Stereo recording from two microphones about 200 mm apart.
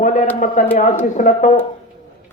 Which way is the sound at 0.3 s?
40° left (ahead or behind).